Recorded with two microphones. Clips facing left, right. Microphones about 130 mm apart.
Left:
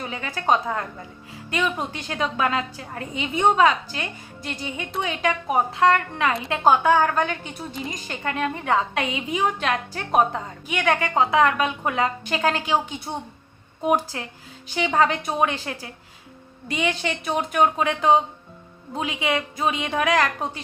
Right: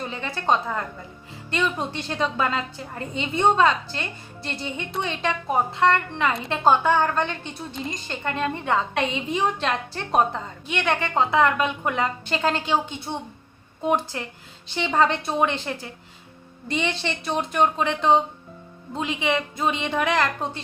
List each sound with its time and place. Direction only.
0.0 s a woman's voice: 10° left (ahead or behind)
14.8 s a woman's voice: 5° left (ahead or behind)